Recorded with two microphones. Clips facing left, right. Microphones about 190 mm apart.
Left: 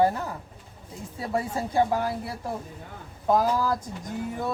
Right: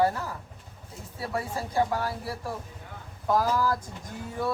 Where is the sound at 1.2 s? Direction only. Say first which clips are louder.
Left 3 dB; 20° left (ahead or behind).